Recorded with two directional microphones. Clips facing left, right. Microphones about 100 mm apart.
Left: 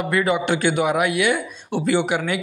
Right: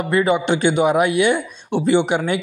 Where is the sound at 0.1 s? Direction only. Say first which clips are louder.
Right 4 dB; 25° right (ahead or behind).